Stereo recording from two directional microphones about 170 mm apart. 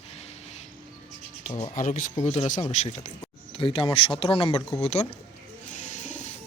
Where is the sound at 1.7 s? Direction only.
50° left (ahead or behind).